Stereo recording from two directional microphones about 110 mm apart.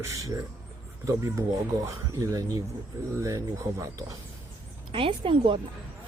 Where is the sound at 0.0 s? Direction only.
30° right (ahead or behind).